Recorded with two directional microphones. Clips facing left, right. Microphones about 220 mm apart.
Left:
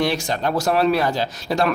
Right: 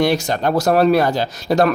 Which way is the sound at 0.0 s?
45° right (ahead or behind).